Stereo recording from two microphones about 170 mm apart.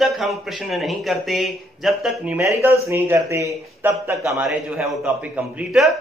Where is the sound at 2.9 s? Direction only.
15° right (ahead or behind).